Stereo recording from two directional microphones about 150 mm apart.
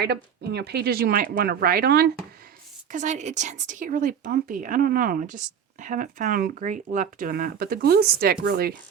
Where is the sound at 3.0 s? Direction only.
50° right (ahead or behind); by 8.8 s 90° right.